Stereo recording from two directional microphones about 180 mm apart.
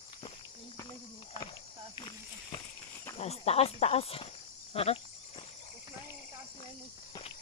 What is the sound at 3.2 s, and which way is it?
Speech, 35° left (ahead or behind).